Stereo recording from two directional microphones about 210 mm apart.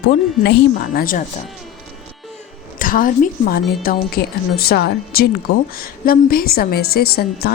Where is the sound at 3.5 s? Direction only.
45° left (ahead or behind).